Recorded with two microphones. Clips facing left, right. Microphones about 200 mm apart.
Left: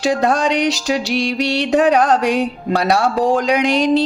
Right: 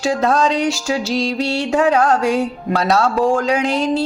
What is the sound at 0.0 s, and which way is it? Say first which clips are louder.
Speech: even; 15° left (ahead or behind).